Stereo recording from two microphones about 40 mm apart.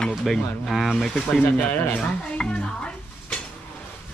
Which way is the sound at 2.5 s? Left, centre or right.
Left.